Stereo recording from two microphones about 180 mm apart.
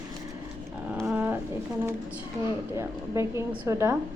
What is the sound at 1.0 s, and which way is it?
Roaring cats, 10° right (ahead or behind).